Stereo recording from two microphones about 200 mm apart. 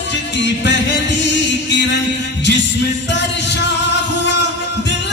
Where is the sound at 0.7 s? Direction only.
60° left (ahead or behind).